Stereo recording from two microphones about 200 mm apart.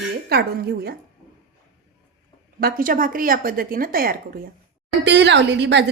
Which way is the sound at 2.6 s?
45° right (ahead or behind).